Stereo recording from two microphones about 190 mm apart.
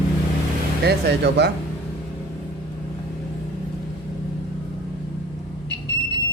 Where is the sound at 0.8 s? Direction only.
60° right (ahead or behind).